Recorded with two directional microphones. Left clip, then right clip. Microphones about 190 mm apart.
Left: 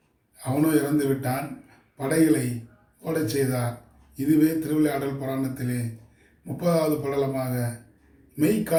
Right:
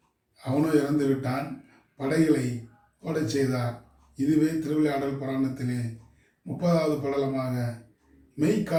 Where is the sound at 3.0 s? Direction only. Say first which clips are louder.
Left 2 dB; 15° left (ahead or behind).